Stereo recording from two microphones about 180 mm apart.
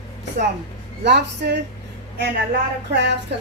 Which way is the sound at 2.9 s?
75° right (ahead or behind).